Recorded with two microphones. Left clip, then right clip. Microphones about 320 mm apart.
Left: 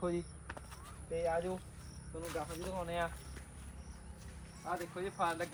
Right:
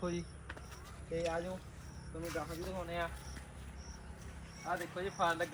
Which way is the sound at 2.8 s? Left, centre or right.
Left.